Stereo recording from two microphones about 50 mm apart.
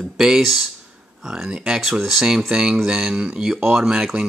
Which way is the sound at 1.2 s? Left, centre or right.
Centre.